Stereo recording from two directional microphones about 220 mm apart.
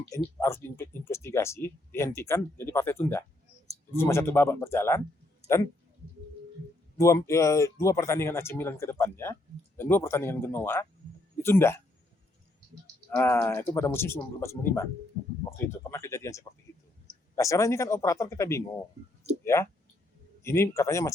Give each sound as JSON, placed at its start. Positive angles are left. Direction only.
{"t": 0.1, "sound": "speech", "side_deg": 10}
{"t": 5.4, "sound": "a sound", "side_deg": -30}
{"t": 7.0, "sound": "speech", "side_deg": 15}
{"t": 13.1, "sound": "speech", "side_deg": 10}